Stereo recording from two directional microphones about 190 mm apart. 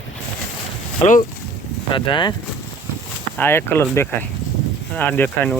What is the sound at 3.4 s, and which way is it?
Speech, 10° left (ahead or behind).